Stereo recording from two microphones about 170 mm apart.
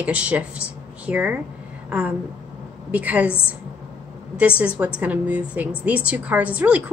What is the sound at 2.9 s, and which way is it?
Speech, 10° right (ahead or behind).